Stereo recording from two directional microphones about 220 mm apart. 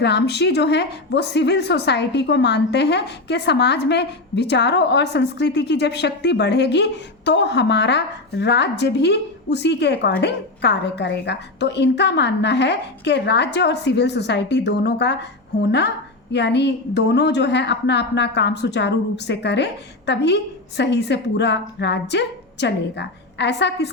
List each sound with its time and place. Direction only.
0.0 s a woman's voice: 50° left (ahead or behind)
16.3 s a woman's voice: 50° left (ahead or behind)